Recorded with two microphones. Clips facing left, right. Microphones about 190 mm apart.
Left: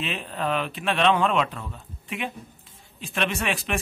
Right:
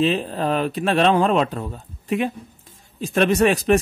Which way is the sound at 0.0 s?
35° right (ahead or behind).